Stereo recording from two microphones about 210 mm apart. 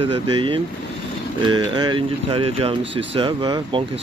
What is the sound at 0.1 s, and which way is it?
Speech, 20° right (ahead or behind).